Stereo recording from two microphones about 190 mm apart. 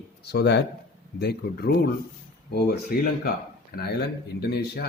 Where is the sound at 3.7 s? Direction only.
50° left (ahead or behind).